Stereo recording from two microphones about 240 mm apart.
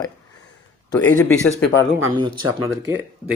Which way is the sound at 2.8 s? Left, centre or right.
Right.